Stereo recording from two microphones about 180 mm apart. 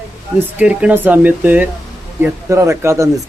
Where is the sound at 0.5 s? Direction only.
10° right (ahead or behind).